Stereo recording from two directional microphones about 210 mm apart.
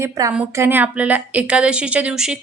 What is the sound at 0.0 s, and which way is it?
A woman's voice, 15° right (ahead or behind).